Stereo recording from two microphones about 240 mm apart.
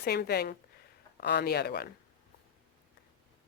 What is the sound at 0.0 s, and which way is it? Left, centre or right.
Speech, left.